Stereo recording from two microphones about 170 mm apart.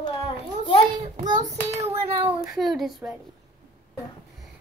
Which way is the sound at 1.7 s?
15° right (ahead or behind).